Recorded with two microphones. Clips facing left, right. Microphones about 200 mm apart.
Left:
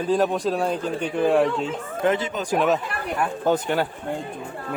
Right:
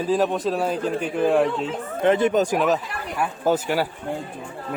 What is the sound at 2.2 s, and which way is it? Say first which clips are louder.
Speech: right 9 dB; 50° right (ahead or behind).